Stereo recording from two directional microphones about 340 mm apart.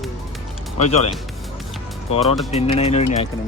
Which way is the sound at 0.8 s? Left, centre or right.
Centre.